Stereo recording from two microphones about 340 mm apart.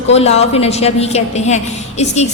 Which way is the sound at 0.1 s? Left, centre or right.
Centre.